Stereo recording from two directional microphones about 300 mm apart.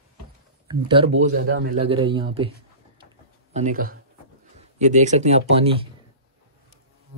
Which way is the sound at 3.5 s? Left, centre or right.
Right.